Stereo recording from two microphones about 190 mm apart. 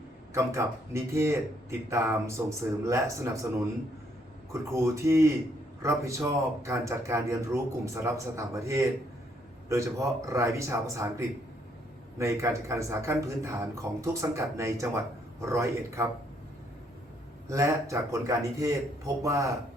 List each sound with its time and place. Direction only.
0.3 s a man's voice: 15° right (ahead or behind)
4.7 s a man's voice: 15° right (ahead or behind)
17.5 s a man's voice: 15° right (ahead or behind)